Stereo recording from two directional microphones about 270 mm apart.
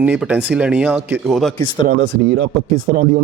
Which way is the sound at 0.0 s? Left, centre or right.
Centre.